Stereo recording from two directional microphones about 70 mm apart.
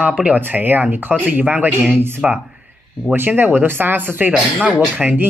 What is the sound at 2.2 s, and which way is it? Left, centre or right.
Speech, centre.